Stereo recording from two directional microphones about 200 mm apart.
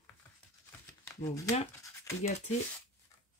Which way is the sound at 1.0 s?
15° left (ahead or behind).